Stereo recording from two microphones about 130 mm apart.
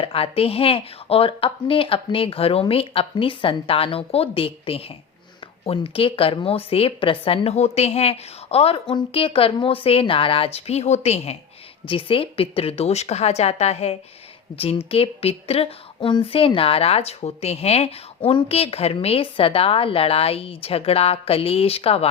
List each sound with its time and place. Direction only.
0.0 s a woman's voice: 45° left (ahead or behind)
11.9 s a woman's voice: 40° left (ahead or behind)